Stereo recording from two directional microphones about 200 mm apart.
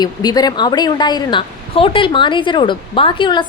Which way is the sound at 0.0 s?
20° left (ahead or behind).